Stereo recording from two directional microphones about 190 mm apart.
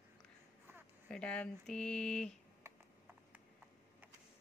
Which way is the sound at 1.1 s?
5° left (ahead or behind).